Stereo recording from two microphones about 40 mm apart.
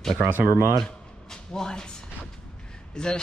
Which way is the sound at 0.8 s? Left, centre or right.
Centre.